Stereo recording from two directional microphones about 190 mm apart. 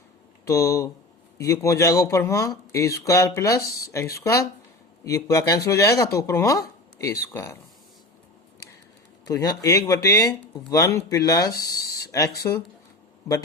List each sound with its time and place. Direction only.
0.4 s speech: 15° left (ahead or behind)
9.2 s speech: 20° left (ahead or behind)